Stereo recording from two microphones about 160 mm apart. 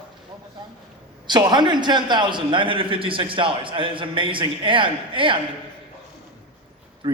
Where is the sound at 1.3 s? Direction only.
25° right (ahead or behind).